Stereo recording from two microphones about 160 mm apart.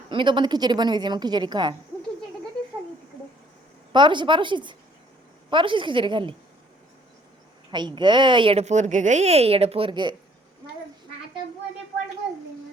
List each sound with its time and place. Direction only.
0.1 s a woman's voice: 30° right (ahead or behind)
3.9 s a woman's voice: 30° right (ahead or behind)
7.7 s speech: 30° right (ahead or behind)